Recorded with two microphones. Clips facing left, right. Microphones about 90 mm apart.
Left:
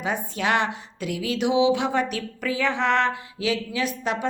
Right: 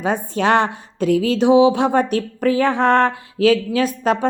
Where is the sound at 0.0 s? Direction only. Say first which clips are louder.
Right 7 dB; 40° right (ahead or behind).